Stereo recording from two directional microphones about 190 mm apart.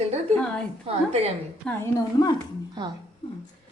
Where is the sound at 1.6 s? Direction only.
15° left (ahead or behind).